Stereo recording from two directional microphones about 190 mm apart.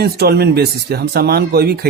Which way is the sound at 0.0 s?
55° right (ahead or behind).